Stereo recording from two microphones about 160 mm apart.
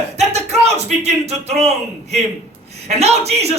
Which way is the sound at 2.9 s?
40° right (ahead or behind).